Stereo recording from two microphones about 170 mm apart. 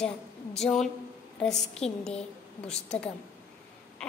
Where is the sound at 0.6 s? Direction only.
5° left (ahead or behind).